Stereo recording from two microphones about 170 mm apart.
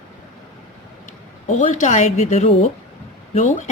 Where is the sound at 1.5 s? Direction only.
45° left (ahead or behind).